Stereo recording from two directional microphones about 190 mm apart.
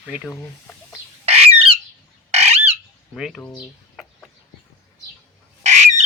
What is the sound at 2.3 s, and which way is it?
Fowl, 35° right (ahead or behind).